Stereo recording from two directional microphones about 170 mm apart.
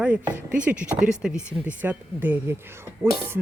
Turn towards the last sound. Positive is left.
turn(degrees=-15)  # may be behind; listen again after turning